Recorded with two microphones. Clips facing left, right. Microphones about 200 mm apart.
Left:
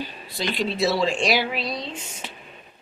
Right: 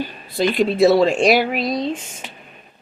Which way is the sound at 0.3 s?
50° right (ahead or behind).